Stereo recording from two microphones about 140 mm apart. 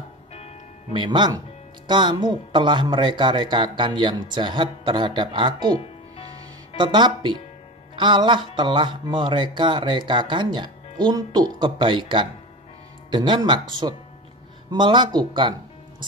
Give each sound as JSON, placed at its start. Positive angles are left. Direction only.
{"t": 0.9, "sound": "speech", "side_deg": -35}
{"t": 6.8, "sound": "speech", "side_deg": -35}